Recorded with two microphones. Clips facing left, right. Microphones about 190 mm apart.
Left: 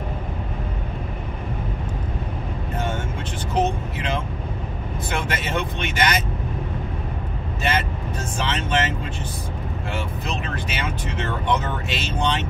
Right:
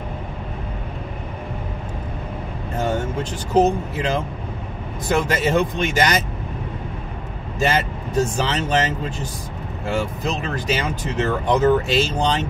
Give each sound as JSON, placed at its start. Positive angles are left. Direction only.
{"t": 2.8, "sound": "speech", "side_deg": -40}
{"t": 7.6, "sound": "speech", "side_deg": -40}